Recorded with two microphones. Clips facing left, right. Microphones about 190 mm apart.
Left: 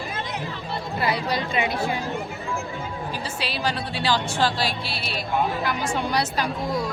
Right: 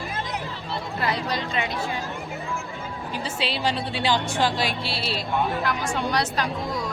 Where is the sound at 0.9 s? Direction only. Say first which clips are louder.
Left 2 dB; 15° left (ahead or behind).